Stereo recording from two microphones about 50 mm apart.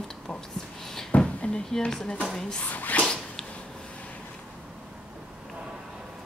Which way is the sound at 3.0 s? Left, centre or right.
Centre.